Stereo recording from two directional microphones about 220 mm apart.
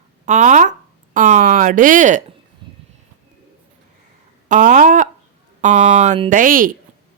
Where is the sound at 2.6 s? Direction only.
20° right (ahead or behind).